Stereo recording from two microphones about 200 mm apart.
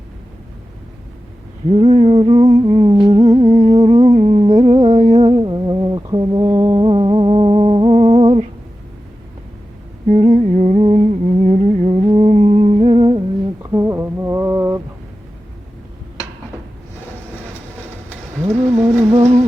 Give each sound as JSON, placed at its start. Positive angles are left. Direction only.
{"t": 1.7, "sound": "humming", "side_deg": -35}
{"t": 10.1, "sound": "humming", "side_deg": -35}
{"t": 18.5, "sound": "a sound", "side_deg": -10}
{"t": 19.1, "sound": "music", "side_deg": -30}